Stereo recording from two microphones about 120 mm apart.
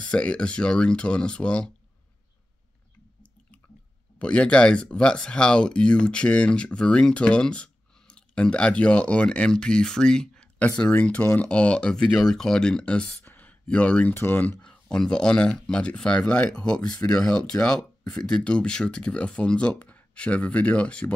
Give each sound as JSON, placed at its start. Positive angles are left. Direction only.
{"t": 0.0, "sound": "speech", "side_deg": 10}
{"t": 4.2, "sound": "speech", "side_deg": 10}